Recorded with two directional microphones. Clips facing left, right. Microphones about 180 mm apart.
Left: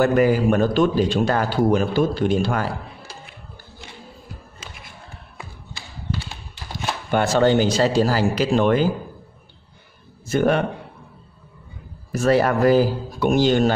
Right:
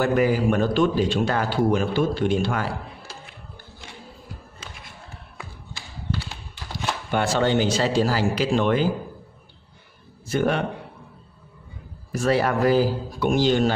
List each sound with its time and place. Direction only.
0.0 s a man's voice: 45° left (ahead or behind)
7.1 s speech: 45° left (ahead or behind)
10.2 s speech: 45° left (ahead or behind)
12.1 s speech: 45° left (ahead or behind)